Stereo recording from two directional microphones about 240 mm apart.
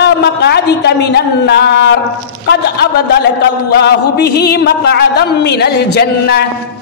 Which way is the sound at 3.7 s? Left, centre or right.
Left.